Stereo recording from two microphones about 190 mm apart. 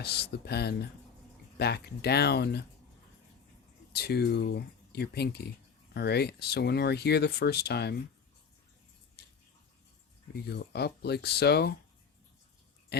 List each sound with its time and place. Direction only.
0.0 s speech: 60° left (ahead or behind)
3.9 s speech: 60° left (ahead or behind)
10.5 s speech: 60° left (ahead or behind)
12.9 s speech: 60° left (ahead or behind)